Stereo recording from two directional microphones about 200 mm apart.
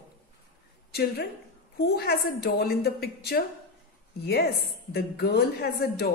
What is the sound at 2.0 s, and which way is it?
A woman's voice, 55° left (ahead or behind).